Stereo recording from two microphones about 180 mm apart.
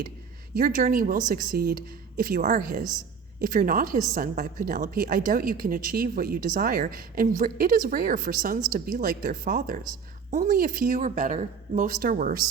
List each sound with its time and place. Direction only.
0.5 s speech: 55° right (ahead or behind)